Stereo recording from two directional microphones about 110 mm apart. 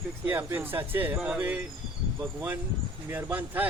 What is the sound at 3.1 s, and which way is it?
Speech, 15° right (ahead or behind).